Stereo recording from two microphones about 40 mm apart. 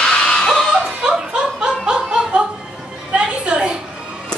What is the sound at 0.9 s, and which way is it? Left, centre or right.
Music, right.